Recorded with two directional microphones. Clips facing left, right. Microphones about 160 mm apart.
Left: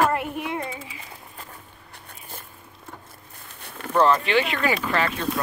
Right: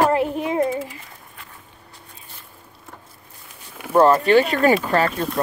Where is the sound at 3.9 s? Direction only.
35° right (ahead or behind).